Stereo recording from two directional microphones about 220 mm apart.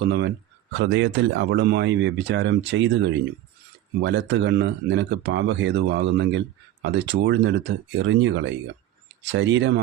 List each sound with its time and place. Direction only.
0.0 s speech: 50° right (ahead or behind)